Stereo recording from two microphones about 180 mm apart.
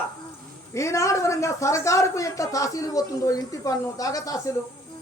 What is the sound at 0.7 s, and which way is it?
Speech, 15° left (ahead or behind).